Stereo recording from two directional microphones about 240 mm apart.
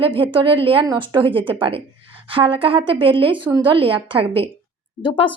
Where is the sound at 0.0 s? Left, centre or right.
Right.